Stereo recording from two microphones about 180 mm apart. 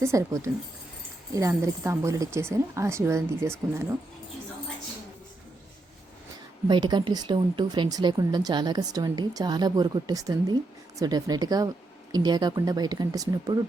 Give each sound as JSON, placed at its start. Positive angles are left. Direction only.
{"t": 0.0, "sound": "a woman's voice", "side_deg": -15}
{"t": 6.7, "sound": "speech", "side_deg": -25}